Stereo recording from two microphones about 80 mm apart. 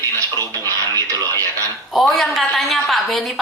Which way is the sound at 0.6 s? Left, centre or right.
Right.